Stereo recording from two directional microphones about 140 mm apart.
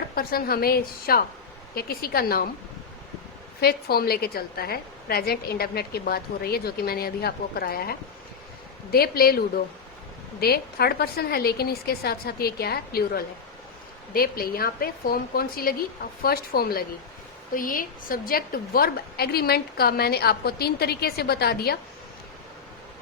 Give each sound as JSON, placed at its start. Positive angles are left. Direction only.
{"t": 0.2, "sound": "a woman's voice", "side_deg": 90}
{"t": 3.7, "sound": "a woman's voice", "side_deg": 90}
{"t": 10.4, "sound": "a woman's voice", "side_deg": 90}